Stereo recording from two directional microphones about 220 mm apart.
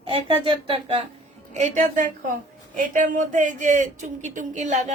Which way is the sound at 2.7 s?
35° right (ahead or behind).